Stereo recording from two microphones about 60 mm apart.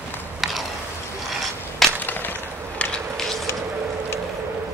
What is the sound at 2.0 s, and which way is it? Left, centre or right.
Skateboard, left.